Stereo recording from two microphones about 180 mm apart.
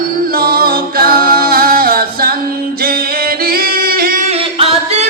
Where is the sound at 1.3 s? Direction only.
55° right (ahead or behind).